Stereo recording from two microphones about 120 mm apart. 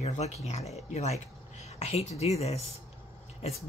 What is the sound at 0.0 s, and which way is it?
Speech, 65° left (ahead or behind).